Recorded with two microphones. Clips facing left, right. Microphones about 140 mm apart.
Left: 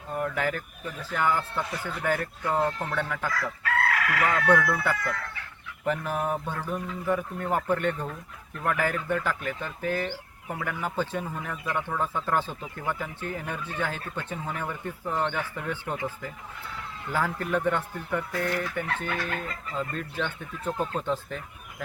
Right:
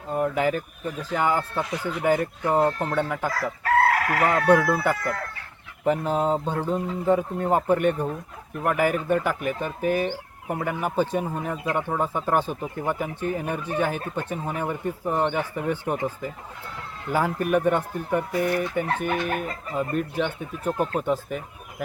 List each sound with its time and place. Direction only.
0.1 s speech: 20° right (ahead or behind)
3.6 s chicken: 40° right (ahead or behind)
4.4 s speech: 20° right (ahead or behind)